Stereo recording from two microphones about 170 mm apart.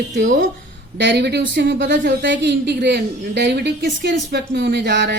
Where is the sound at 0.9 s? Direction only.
80° right.